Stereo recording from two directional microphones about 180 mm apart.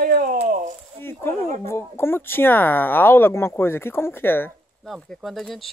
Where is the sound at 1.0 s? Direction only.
15° left (ahead or behind).